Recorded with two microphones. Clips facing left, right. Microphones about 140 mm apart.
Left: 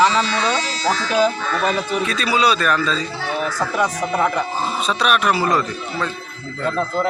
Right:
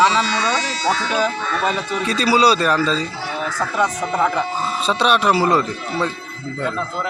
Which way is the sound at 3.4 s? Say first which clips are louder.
Even; 10° left (ahead or behind).